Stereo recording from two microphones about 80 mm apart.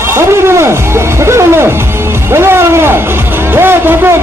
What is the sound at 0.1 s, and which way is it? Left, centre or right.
Speech, right.